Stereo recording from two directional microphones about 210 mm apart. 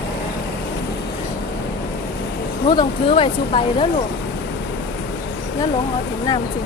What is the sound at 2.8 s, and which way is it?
Speech, 25° left (ahead or behind).